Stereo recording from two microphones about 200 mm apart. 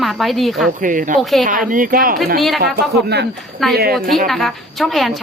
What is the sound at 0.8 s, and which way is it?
Speech, 40° right (ahead or behind).